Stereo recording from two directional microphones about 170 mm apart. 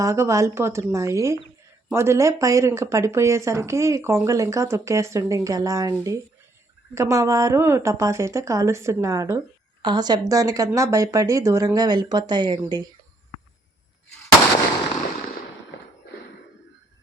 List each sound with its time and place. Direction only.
0.0 s speech: 15° right (ahead or behind)